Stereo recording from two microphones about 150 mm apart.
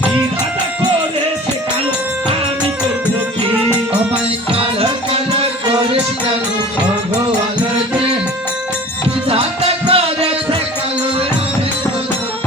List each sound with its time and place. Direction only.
4.5 s music: 40° right (ahead or behind)
9.3 s music: 40° right (ahead or behind)